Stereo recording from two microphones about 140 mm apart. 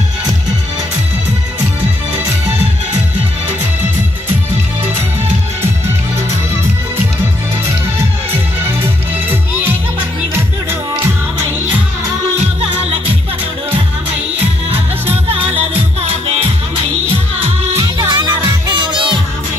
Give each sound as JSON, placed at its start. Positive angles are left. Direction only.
{"t": 15.2, "sound": "music", "side_deg": -45}
{"t": 17.7, "sound": "music", "side_deg": -30}